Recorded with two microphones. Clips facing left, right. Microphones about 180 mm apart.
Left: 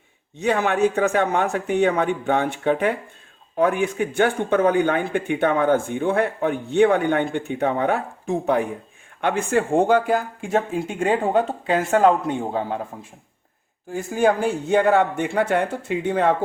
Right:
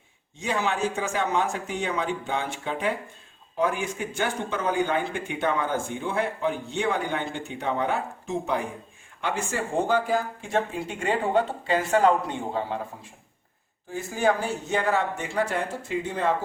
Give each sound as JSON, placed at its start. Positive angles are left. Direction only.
{"t": 0.3, "sound": "speech", "side_deg": 60}
{"t": 11.6, "sound": "speech", "side_deg": 50}
{"t": 13.9, "sound": "speech", "side_deg": 55}